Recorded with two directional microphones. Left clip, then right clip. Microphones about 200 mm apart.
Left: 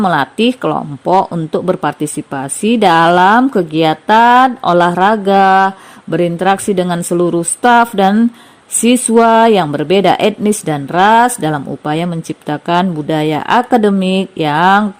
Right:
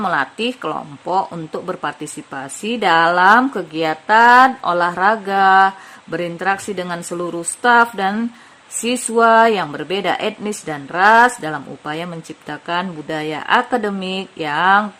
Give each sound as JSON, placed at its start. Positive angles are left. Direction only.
{"t": 0.0, "sound": "speech", "side_deg": 35}